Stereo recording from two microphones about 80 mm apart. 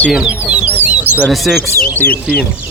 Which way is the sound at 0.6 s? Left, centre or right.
Right.